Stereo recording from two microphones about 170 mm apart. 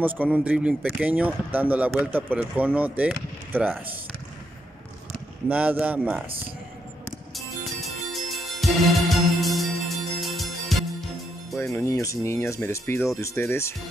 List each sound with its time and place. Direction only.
0.0 s speech: 10° right (ahead or behind)
5.5 s speech: 10° right (ahead or behind)
7.3 s music: centre (ahead or behind)
11.6 s speech: 15° left (ahead or behind)